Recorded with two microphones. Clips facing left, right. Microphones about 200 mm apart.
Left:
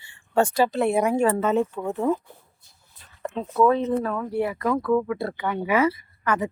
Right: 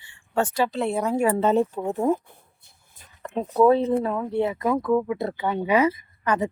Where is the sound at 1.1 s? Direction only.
10° right (ahead or behind).